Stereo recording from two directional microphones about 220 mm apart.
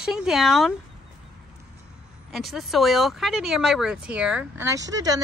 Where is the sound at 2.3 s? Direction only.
Centre (ahead or behind).